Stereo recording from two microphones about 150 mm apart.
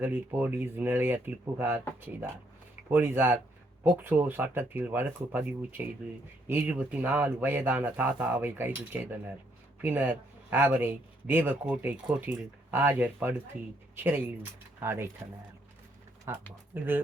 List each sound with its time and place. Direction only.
0.0 s speech: 10° right (ahead or behind)
2.9 s speech: 15° right (ahead or behind)
6.9 s speech: 10° right (ahead or behind)
16.3 s speech: 20° right (ahead or behind)